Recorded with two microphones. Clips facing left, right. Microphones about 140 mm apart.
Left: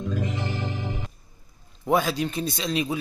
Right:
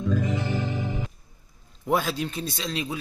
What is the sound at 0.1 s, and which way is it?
Music, 15° left (ahead or behind).